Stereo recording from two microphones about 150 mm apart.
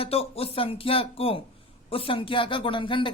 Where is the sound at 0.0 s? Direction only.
40° left (ahead or behind).